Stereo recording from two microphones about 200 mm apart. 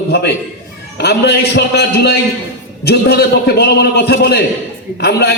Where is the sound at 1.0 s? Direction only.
55° left (ahead or behind).